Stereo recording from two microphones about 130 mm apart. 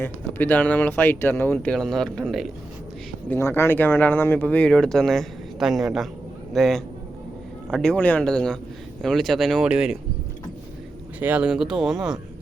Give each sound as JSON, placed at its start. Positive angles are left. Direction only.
{"t": 0.0, "sound": "speech", "side_deg": 15}
{"t": 1.5, "sound": "speech", "side_deg": 5}
{"t": 3.2, "sound": "speech", "side_deg": 20}
{"t": 11.2, "sound": "speech", "side_deg": -10}